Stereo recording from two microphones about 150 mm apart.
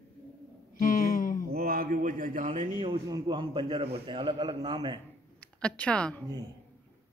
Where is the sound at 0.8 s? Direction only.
65° left (ahead or behind).